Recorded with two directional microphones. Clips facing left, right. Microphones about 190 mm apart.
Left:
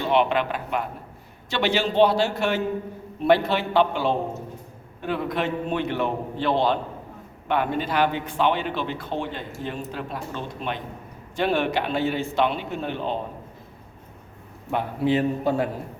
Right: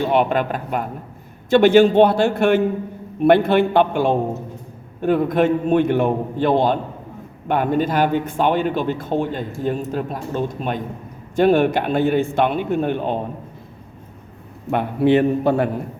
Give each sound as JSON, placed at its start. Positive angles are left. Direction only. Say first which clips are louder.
{"t": 0.1, "sound": "speech", "louder": "right 3 dB", "side_deg": -45}
{"t": 14.7, "sound": "a man's voice", "louder": "right 7 dB", "side_deg": -65}